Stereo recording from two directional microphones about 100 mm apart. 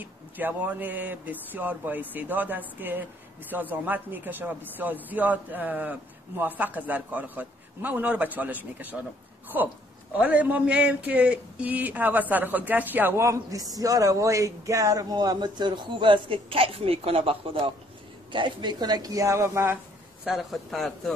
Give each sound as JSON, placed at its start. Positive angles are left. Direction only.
{"t": 0.0, "sound": "a woman's voice", "side_deg": -15}
{"t": 18.3, "sound": "speech", "side_deg": -50}
{"t": 20.2, "sound": "a man's voice", "side_deg": 0}